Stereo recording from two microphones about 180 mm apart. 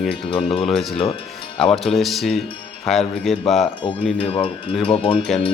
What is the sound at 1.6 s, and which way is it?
Speech, centre (ahead or behind).